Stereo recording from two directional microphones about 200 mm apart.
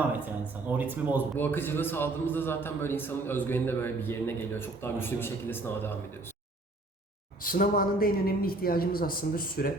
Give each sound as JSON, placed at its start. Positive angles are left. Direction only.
{"t": 0.7, "sound": "speech", "side_deg": -10}
{"t": 1.4, "sound": "a man's voice", "side_deg": 10}
{"t": 7.3, "sound": "a woman's voice", "side_deg": 45}